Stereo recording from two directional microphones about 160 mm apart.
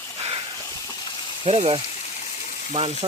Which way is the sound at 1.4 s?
40° right (ahead or behind).